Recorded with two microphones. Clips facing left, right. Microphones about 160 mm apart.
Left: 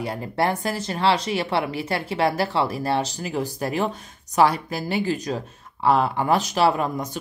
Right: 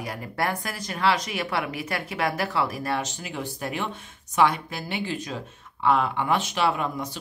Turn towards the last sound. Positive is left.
turn(degrees=40)  # may be behind; listen again after turning